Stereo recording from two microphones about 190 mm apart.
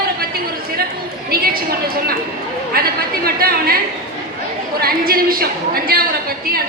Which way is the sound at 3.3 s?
55° right (ahead or behind).